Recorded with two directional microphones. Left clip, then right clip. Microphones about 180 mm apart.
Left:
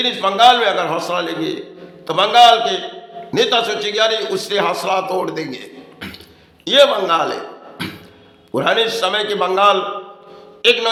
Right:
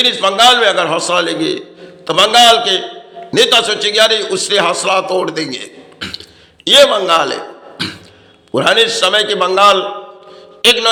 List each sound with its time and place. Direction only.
0.0 s a man's voice: 15° right (ahead or behind)
6.0 s throat clearing: 10° right (ahead or behind)
6.7 s a man's voice: 15° right (ahead or behind)